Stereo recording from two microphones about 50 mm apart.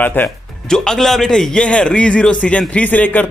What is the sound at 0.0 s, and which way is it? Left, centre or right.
Speech, left.